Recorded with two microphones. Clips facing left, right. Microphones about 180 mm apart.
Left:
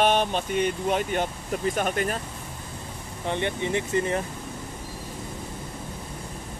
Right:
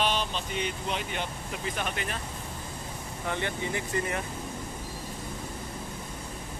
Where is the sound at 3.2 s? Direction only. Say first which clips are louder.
Left 5 dB; 20° left (ahead or behind).